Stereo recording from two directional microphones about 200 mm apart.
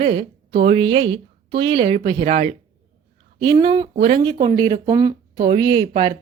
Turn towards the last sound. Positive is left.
turn(degrees=-20)  # may be behind; listen again after turning